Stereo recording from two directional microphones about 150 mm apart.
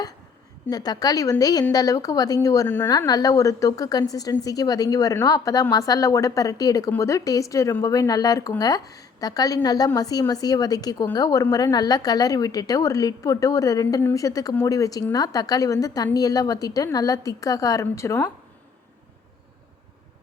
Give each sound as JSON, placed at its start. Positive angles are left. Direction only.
{"t": 0.7, "sound": "a woman's voice", "side_deg": 25}